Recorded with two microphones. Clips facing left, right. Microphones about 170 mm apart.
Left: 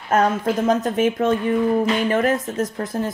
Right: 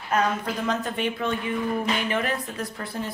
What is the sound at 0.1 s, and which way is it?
Speech, 45° left (ahead or behind).